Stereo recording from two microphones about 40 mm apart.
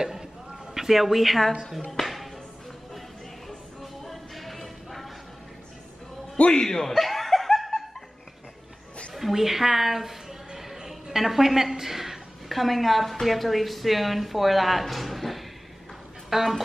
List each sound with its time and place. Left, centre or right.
0.0 s a sound: centre
0.7 s speech: centre
1.8 s music: centre
3.4 s music: centre
6.3 s a man's voice: left
6.6 s speech: centre
6.9 s laughter: centre
9.1 s a woman's voice: centre